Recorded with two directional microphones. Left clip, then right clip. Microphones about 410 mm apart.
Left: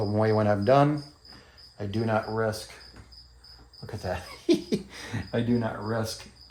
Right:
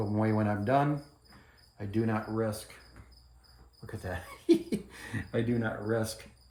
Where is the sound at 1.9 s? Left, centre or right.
Left.